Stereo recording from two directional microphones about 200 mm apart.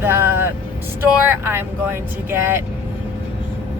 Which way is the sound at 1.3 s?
10° right (ahead or behind).